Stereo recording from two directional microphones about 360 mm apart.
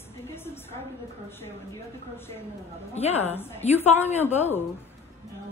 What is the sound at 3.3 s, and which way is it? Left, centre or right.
Speech, centre.